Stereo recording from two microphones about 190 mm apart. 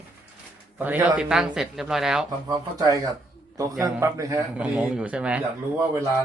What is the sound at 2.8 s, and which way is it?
A man's voice, 20° right (ahead or behind).